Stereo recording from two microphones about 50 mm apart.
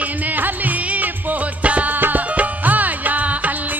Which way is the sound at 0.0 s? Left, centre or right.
Right.